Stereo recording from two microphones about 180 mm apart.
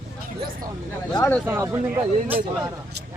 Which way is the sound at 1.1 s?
15° left (ahead or behind).